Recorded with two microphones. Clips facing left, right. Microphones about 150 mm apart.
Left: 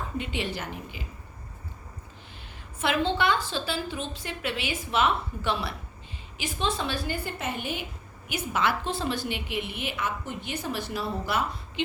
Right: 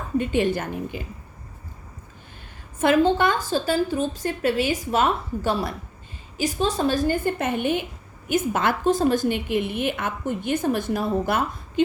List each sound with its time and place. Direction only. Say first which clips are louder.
0.2 s a woman's voice: right 11 dB; 50° right (ahead or behind)
2.7 s a woman's voice: right 8 dB; 45° right (ahead or behind)